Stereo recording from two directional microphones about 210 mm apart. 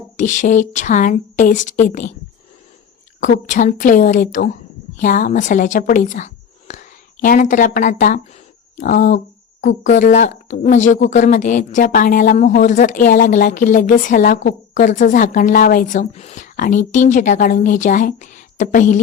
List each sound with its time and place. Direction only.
0.2 s speech: 35° left (ahead or behind)
3.2 s a woman's voice: 35° left (ahead or behind)